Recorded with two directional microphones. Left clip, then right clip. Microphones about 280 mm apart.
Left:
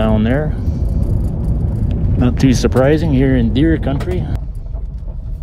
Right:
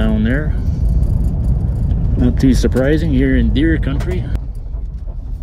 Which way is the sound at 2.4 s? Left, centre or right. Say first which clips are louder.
Left 3 dB; left.